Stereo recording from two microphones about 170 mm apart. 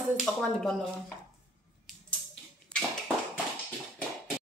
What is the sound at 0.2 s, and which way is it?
Speech, 5° left (ahead or behind).